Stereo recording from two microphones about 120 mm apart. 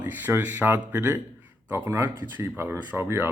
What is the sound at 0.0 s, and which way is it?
Speech, 15° right (ahead or behind).